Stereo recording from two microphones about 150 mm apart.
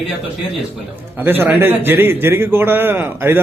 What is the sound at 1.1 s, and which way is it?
A man's voice, 15° right (ahead or behind).